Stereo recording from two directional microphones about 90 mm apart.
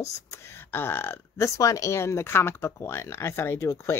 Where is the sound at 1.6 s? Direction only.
35° left (ahead or behind).